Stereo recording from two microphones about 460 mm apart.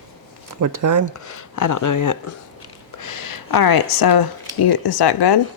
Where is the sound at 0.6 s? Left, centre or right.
Right.